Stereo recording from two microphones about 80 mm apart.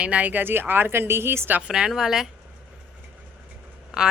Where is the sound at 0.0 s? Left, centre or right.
Centre.